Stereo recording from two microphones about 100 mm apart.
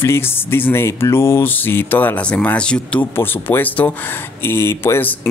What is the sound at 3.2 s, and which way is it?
Speech, 20° left (ahead or behind).